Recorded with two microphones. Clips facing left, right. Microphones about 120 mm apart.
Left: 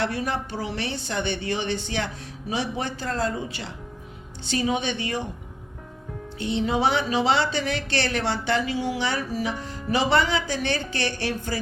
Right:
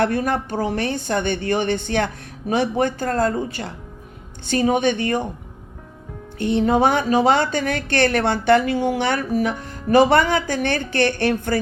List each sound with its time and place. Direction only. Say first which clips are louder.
0.0 s a woman's voice: right 7 dB; 50° right (ahead or behind)
6.4 s a woman's voice: right 6 dB; 50° right (ahead or behind)